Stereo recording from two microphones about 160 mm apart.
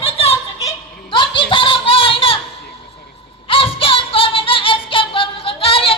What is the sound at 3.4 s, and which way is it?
Music, 35° left (ahead or behind).